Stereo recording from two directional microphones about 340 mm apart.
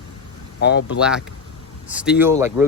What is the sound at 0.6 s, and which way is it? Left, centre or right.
Speech, left.